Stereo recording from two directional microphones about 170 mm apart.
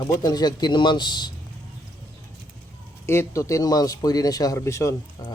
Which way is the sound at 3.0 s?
15° left (ahead or behind).